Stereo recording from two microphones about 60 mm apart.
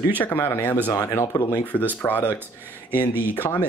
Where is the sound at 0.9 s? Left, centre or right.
Left.